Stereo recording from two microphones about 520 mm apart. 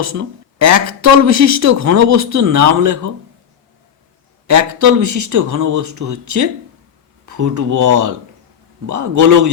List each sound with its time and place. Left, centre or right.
0.0 s speech: right
4.4 s speech: right